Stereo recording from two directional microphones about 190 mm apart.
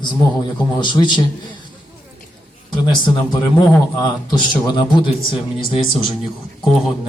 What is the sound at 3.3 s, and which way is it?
A man's voice, 25° left (ahead or behind).